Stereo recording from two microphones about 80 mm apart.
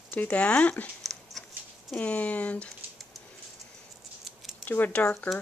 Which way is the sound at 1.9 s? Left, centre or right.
Centre.